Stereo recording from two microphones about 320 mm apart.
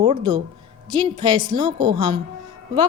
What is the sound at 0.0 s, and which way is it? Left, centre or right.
A woman's voice, centre.